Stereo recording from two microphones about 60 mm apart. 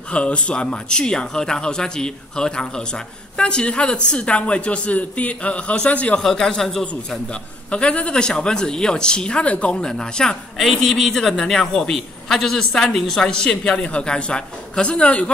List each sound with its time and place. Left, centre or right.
0.1 s speech: centre
6.2 s speech: centre
7.7 s speech: centre